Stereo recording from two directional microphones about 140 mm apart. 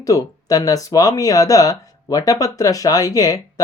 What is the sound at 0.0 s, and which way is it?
Speech, 25° left (ahead or behind).